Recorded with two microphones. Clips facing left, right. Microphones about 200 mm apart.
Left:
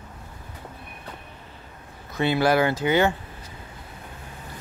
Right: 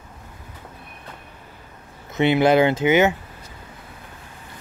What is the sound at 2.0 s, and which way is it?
Speech, 20° right (ahead or behind).